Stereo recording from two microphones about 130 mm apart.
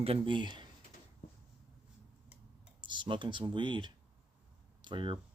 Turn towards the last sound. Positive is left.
turn(degrees=-35)  # may be behind; listen again after turning